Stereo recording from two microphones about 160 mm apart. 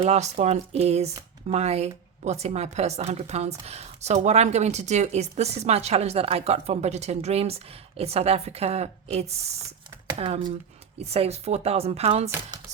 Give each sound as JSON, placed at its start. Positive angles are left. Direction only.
{"t": 0.0, "sound": "a woman's voice", "side_deg": -45}